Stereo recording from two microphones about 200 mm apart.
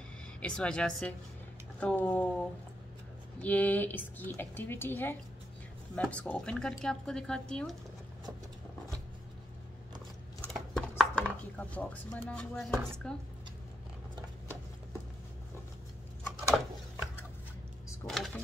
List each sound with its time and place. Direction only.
0.4 s a woman's voice: 5° left (ahead or behind)
10.4 s chopping: centre (ahead or behind)
11.7 s a woman's voice: 5° left (ahead or behind)
18.0 s a sound: centre (ahead or behind)